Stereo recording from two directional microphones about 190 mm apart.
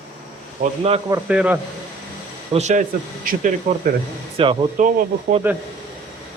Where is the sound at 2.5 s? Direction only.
40° right (ahead or behind).